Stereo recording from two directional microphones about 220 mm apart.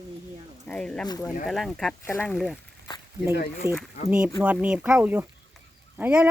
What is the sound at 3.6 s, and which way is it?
Speech, 10° right (ahead or behind).